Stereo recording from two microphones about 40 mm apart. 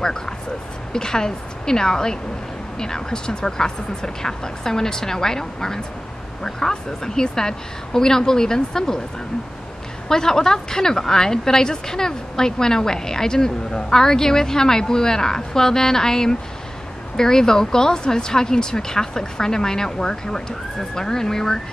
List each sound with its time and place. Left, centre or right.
0.9 s a woman's voice: centre
10.0 s a woman's voice: centre